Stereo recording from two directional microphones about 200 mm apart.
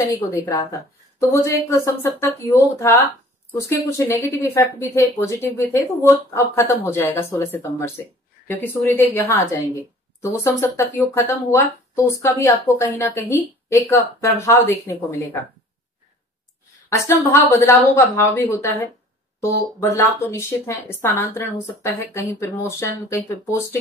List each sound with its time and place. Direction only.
0.3 s a woman's voice: 15° left (ahead or behind)
16.9 s a woman's voice: 10° left (ahead or behind)